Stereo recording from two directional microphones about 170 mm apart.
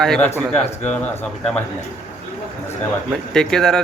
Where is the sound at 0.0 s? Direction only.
5° left (ahead or behind).